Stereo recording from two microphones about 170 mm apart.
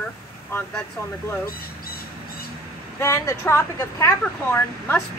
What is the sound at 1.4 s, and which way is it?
Crow, 60° left (ahead or behind).